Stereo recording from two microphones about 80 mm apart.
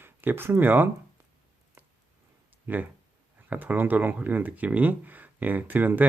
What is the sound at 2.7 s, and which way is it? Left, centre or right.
Speech, right.